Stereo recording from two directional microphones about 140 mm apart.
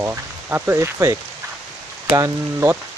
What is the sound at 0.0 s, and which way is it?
Speech, 15° right (ahead or behind).